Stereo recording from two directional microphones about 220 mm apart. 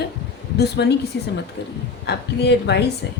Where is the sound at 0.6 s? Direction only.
50° left (ahead or behind).